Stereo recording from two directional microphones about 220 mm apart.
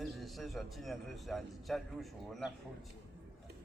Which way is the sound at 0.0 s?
Centre (ahead or behind).